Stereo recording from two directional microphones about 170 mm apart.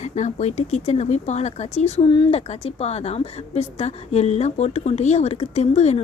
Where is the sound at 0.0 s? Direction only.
45° left (ahead or behind).